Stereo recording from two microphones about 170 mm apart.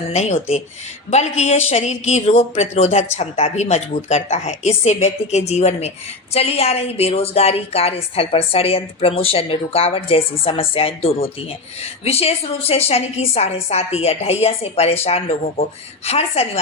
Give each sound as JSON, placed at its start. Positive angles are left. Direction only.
{"t": 0.1, "sound": "a woman's voice", "side_deg": 40}